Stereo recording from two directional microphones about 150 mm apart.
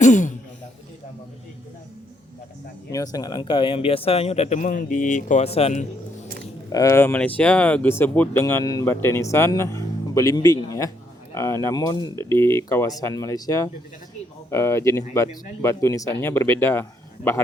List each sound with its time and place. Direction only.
0.0 s a man's voice: 55° left (ahead or behind)
2.9 s speech: 25° left (ahead or behind); by 5.4 s 60° left (ahead or behind)
5.4 s speech: 45° left (ahead or behind)
6.7 s speech: 20° left (ahead or behind)